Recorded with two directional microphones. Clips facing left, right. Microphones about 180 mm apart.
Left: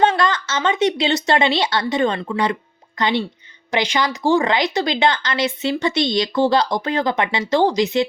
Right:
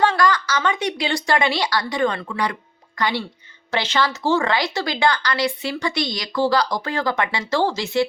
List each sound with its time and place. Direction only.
0.0 s speech: 20° left (ahead or behind)